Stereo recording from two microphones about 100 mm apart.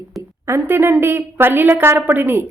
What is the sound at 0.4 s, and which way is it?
A woman's voice, 25° right (ahead or behind).